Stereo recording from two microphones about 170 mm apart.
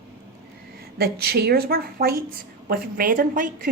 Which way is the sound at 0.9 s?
70° right (ahead or behind).